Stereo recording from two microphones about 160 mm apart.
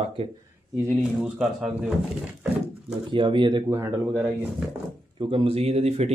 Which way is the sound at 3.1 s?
30° right (ahead or behind).